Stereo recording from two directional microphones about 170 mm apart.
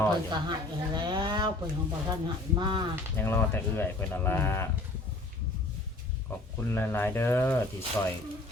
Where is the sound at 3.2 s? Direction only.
10° left (ahead or behind).